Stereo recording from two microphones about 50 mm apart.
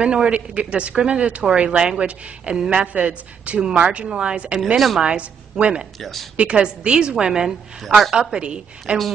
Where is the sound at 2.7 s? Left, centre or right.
Right.